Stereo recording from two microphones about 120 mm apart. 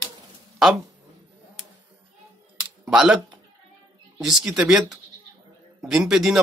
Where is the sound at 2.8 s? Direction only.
10° right (ahead or behind).